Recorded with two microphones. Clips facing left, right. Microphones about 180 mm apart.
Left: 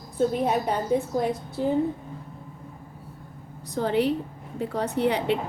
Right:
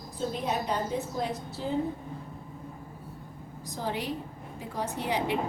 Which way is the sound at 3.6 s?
65° left (ahead or behind).